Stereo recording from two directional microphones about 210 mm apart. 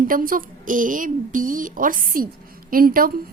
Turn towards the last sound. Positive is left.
turn(degrees=-45)  # may be behind; listen again after turning